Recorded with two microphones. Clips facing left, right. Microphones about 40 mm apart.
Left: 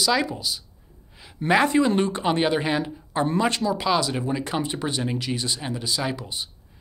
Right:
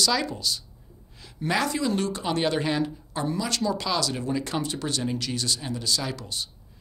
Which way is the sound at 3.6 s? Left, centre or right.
Centre.